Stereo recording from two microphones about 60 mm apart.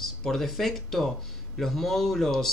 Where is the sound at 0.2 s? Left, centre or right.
Centre.